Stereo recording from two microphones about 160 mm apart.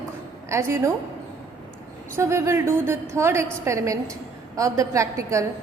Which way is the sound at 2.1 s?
20° right (ahead or behind).